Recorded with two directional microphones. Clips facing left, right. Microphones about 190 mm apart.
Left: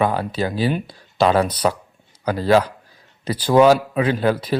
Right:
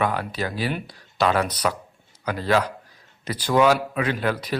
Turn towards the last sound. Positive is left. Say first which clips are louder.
# left 6 dB
turn(degrees=30)  # may be behind; listen again after turning